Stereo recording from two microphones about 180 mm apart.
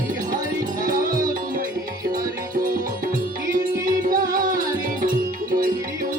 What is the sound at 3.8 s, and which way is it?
Music, 50° right (ahead or behind).